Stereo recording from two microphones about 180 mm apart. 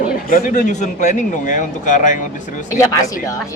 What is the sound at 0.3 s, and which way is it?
A man's voice, 50° left (ahead or behind).